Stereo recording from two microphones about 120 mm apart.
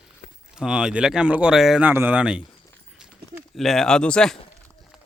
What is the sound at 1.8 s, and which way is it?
Speech, 15° right (ahead or behind).